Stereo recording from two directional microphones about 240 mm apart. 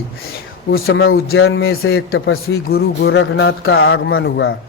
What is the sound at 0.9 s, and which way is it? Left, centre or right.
A man's voice, left.